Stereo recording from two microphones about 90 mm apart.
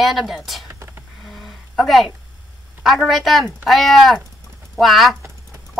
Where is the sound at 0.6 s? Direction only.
30° right (ahead or behind).